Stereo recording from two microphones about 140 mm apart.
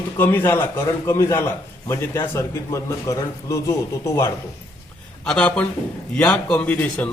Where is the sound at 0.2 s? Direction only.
15° left (ahead or behind).